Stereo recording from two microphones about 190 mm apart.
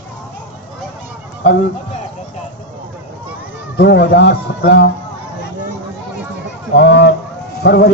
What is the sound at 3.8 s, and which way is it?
A man's voice, 60° left (ahead or behind).